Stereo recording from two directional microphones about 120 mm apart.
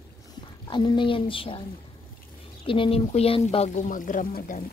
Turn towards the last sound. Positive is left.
turn(degrees=90)